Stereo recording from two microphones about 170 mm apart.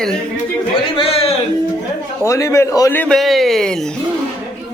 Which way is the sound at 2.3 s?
20° left (ahead or behind).